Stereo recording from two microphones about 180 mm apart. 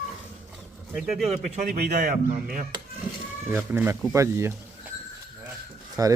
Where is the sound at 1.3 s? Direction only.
40° right (ahead or behind).